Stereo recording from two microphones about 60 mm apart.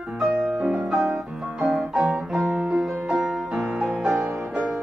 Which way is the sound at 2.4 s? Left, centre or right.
Centre.